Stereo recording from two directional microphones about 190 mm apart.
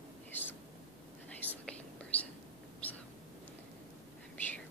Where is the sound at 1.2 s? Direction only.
5° left (ahead or behind).